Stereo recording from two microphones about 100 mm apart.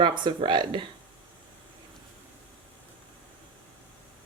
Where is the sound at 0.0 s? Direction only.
50° right (ahead or behind).